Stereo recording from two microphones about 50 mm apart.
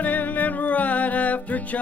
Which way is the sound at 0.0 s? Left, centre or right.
Left.